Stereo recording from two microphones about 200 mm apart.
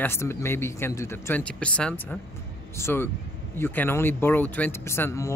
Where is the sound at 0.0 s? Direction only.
10° left (ahead or behind).